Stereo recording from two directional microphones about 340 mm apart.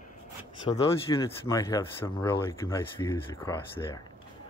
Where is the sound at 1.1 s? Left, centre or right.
Centre.